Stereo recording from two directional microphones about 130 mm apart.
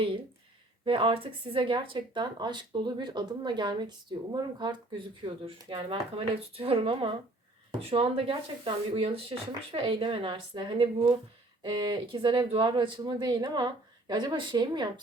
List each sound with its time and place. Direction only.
0.9 s speech: 40° right (ahead or behind)